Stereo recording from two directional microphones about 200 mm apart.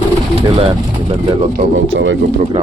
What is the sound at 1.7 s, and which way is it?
Speech, 70° right (ahead or behind).